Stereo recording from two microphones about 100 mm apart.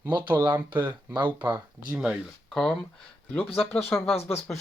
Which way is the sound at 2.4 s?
Centre (ahead or behind).